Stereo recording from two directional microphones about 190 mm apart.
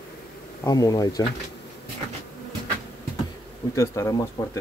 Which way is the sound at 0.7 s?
20° left (ahead or behind).